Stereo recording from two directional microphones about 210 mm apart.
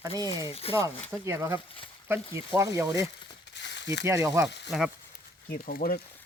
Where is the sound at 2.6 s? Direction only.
15° right (ahead or behind).